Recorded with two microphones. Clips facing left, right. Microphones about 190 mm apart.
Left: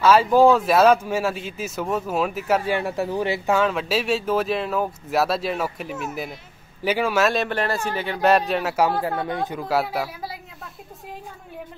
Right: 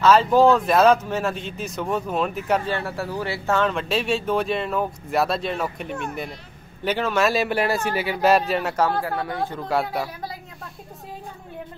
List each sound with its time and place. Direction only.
0.0 s speech: 10° left (ahead or behind)
2.7 s speech: 15° left (ahead or behind); by 8.8 s centre (ahead or behind)
9.2 s speech: 20° left (ahead or behind)
9.6 s speech: 5° left (ahead or behind)